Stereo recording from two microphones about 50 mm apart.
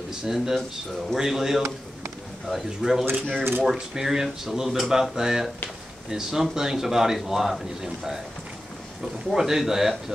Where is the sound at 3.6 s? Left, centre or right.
Centre.